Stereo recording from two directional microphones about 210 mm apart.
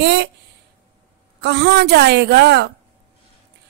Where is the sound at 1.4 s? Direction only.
50° right (ahead or behind).